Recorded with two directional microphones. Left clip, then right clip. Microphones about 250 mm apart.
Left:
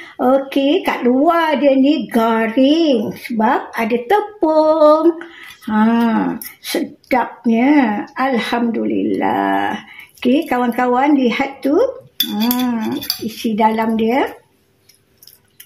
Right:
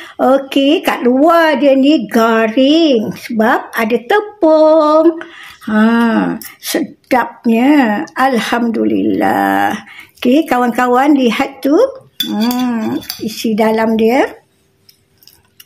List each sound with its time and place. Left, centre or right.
0.2 s speech: right
12.4 s a sound: centre
12.6 s speech: right